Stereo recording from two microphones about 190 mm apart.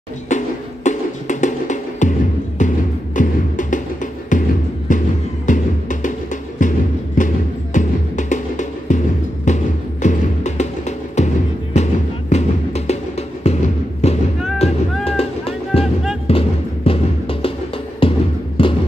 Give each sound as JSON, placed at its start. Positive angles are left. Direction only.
{"t": 0.8, "sound": "music", "side_deg": 40}
{"t": 14.0, "sound": "music", "side_deg": 35}
{"t": 18.6, "sound": "a sound", "side_deg": 30}